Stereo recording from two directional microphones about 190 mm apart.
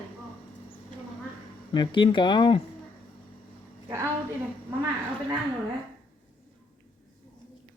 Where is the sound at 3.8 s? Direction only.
15° right (ahead or behind).